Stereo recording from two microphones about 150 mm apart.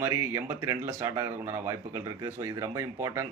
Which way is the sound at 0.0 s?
15° right (ahead or behind).